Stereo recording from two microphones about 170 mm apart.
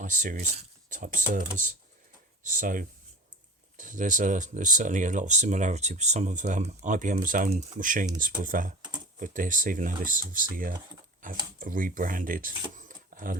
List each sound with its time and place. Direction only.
0.0 s speech: 50° right (ahead or behind)